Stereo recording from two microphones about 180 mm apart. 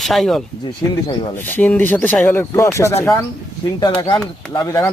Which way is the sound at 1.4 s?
10° left (ahead or behind).